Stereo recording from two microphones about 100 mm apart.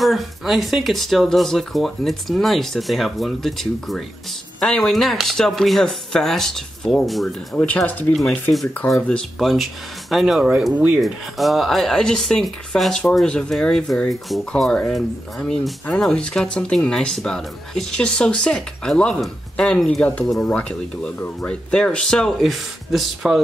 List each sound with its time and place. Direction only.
0.0 s speech: centre (ahead or behind)
7.5 s speech: 15° left (ahead or behind)
8.2 s speech: 5° left (ahead or behind)
10.7 s speech: 15° right (ahead or behind)
11.0 s speech: centre (ahead or behind)